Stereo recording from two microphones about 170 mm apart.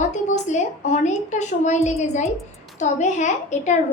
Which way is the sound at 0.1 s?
45° left (ahead or behind).